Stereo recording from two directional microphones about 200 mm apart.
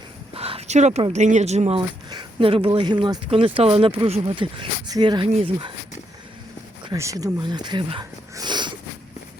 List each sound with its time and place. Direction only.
0.3 s speech: 30° right (ahead or behind)
6.8 s speech: 15° right (ahead or behind)